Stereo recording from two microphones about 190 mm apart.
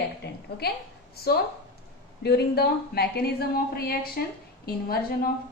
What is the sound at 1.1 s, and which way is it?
A woman's voice, 55° left (ahead or behind).